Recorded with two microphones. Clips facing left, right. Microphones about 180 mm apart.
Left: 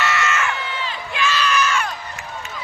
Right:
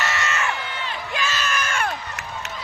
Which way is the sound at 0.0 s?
35° right (ahead or behind).